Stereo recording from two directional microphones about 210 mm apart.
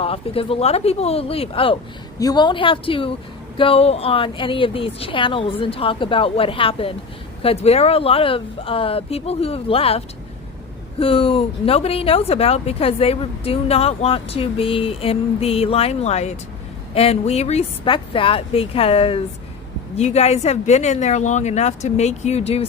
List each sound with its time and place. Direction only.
0.0 s speech: 25° left (ahead or behind)
11.0 s speech: 25° left (ahead or behind)